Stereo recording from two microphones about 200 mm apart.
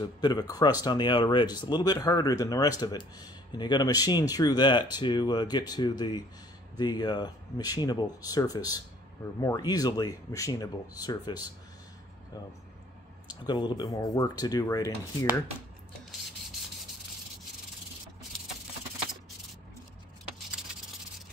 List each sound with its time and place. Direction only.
0.0 s speech: 20° left (ahead or behind)
13.5 s speech: 20° left (ahead or behind)